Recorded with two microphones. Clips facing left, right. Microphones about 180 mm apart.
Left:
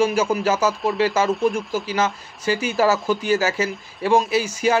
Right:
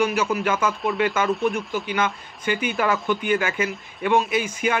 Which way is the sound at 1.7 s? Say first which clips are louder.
Left 2 dB; 35° left (ahead or behind).